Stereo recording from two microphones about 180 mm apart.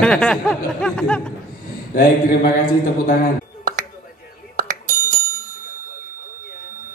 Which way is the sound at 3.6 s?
50° right (ahead or behind).